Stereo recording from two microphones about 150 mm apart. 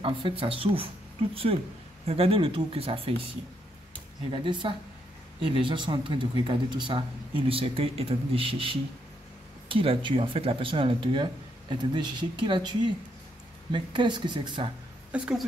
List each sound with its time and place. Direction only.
0.0 s speech: 35° right (ahead or behind)
4.3 s speech: 35° right (ahead or behind)
15.0 s a woman's voice: 5° right (ahead or behind)